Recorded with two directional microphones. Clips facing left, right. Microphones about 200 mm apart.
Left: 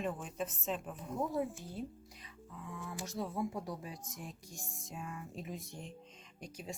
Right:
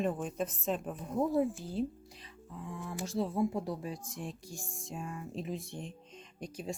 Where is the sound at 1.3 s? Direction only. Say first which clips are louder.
Right 6 dB; 30° right (ahead or behind).